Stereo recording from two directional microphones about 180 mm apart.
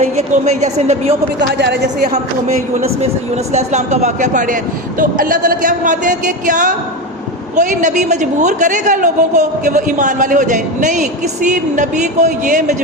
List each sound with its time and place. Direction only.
0.0 s a woman's voice: 40° right (ahead or behind)
1.4 s speech: 65° right (ahead or behind)
2.0 s a woman's voice: 40° right (ahead or behind)